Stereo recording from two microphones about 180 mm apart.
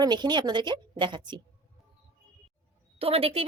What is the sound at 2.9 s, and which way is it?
Speech, 30° right (ahead or behind).